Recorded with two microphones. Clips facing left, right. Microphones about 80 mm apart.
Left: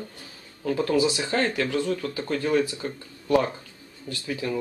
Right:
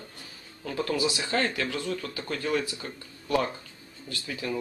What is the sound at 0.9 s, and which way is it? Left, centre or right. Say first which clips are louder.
Speech: left 6 dB; left.